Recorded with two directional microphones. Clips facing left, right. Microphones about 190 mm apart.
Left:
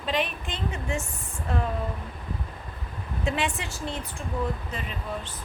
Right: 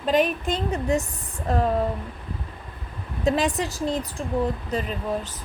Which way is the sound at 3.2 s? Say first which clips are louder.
Right 7 dB; 35° right (ahead or behind).